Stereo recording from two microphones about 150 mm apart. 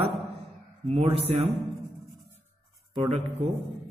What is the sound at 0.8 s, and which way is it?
Music, 45° right (ahead or behind).